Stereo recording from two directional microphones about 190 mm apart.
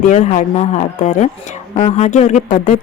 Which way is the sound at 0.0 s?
40° left (ahead or behind).